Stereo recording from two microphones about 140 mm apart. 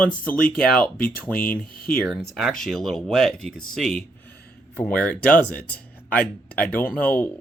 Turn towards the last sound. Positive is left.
turn(degrees=10)  # may be behind; listen again after turning